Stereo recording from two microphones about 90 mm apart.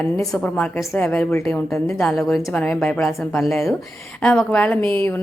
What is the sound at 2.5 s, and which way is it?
A woman's voice, 15° left (ahead or behind).